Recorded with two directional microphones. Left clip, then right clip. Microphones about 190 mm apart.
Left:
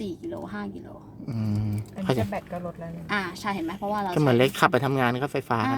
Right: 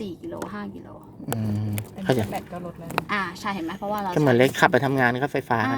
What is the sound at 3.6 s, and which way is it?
Speech, 5° left (ahead or behind).